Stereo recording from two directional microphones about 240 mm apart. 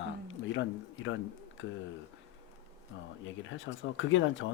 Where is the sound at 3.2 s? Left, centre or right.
Left.